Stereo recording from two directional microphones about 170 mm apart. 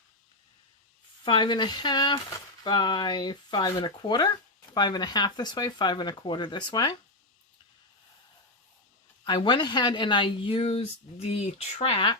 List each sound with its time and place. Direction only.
1.2 s speech: 25° left (ahead or behind)
9.2 s speech: 25° left (ahead or behind)